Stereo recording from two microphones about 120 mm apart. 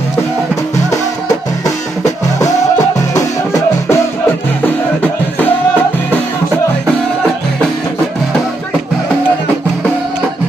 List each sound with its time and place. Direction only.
3.2 s music: 25° left (ahead or behind)